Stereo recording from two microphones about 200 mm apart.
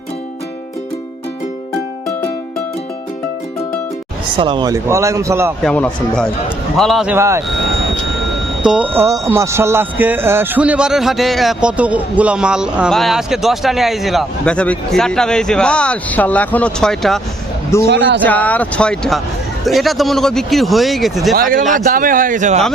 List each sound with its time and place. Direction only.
4.4 s speech: 25° right (ahead or behind)
5.6 s speech: 5° left (ahead or behind); by 7.4 s 15° right (ahead or behind)
8.6 s speech: 5° right (ahead or behind)
9.0 s speech: 15° right (ahead or behind); by 17.2 s centre (ahead or behind)
17.8 s speech: 60° right (ahead or behind)
18.2 s speech: 10° left (ahead or behind)
21.3 s speech: 45° right (ahead or behind)